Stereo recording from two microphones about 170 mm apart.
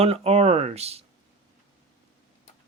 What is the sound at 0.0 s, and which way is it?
Speech, 35° right (ahead or behind).